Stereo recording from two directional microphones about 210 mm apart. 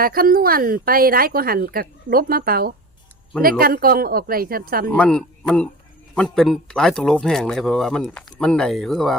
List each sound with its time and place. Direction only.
0.0 s speech: 45° right (ahead or behind)
4.9 s speech: 5° left (ahead or behind)